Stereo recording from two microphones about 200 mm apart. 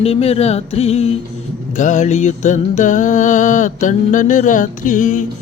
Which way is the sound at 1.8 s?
35° left (ahead or behind).